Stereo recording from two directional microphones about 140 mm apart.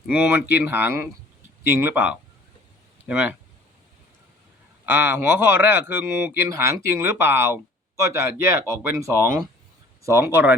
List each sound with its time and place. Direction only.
0.1 s speech: 10° right (ahead or behind)
4.9 s speech: 15° right (ahead or behind)